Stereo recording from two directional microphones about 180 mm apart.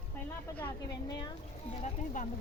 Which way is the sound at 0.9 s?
25° left (ahead or behind).